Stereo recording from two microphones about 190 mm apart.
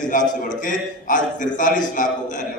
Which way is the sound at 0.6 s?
45° left (ahead or behind).